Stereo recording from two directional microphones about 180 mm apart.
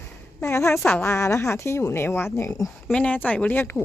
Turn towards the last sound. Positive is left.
turn(degrees=10)  # may be behind; listen again after turning